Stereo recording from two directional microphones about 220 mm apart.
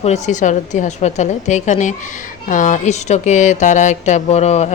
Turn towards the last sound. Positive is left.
turn(degrees=30)  # may be behind; listen again after turning